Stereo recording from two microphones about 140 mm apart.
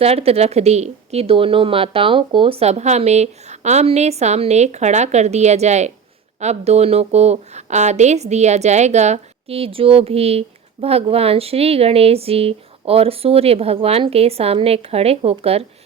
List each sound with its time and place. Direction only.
0.0 s speech: 45° right (ahead or behind)